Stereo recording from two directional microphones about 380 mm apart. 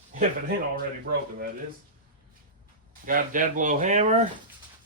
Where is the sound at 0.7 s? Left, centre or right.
Right.